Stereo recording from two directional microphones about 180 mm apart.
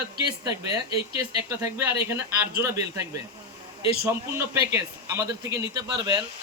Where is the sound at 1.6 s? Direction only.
15° right (ahead or behind).